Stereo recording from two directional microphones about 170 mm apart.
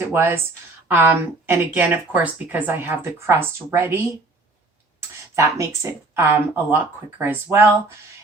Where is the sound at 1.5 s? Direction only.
10° right (ahead or behind).